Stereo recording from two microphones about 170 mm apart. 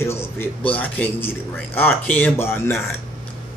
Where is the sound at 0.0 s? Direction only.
15° left (ahead or behind).